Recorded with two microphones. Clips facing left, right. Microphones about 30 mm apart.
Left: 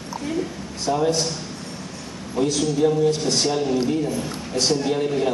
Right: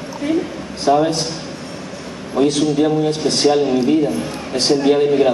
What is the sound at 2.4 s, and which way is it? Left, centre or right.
A man's voice, right.